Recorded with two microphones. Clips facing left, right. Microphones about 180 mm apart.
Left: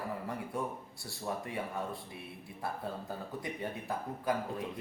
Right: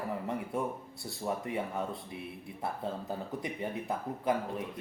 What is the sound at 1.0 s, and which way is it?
Speech, 20° right (ahead or behind).